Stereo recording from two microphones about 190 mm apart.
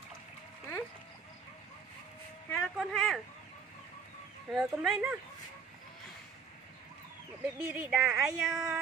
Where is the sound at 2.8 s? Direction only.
Centre (ahead or behind).